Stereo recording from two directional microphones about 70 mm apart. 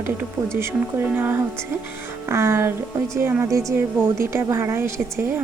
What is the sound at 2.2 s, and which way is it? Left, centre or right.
A woman's voice, right.